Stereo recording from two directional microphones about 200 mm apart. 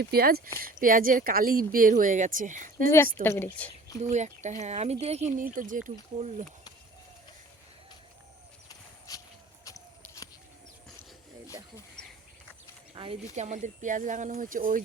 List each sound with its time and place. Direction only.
0.0 s speech: 50° right (ahead or behind)
3.2 s a woman's voice: 10° left (ahead or behind)
4.1 s speech: 35° right (ahead or behind)
8.7 s horse: 20° left (ahead or behind)
9.6 s a sound: 15° left (ahead or behind)
12.9 s a sound: 25° right (ahead or behind)
13.3 s speech: 35° right (ahead or behind)